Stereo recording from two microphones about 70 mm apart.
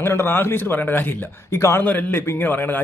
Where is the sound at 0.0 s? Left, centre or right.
Left.